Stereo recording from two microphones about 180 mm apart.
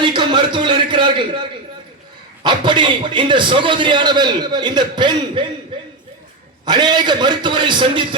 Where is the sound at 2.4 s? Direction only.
25° right (ahead or behind).